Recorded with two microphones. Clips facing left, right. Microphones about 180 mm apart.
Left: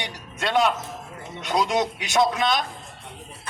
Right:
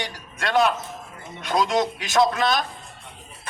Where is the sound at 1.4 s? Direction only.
20° left (ahead or behind).